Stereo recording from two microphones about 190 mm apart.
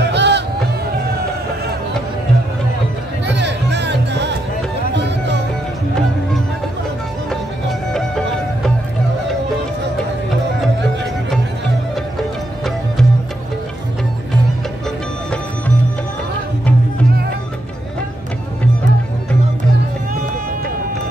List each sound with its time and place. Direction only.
0.0 s music: 65° right (ahead or behind)
3.3 s music: 65° right (ahead or behind)
7.9 s music: centre (ahead or behind)